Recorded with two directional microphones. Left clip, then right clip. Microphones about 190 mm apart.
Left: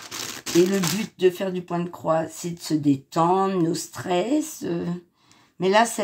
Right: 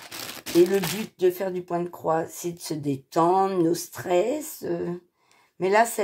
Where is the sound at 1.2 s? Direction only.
30° right (ahead or behind).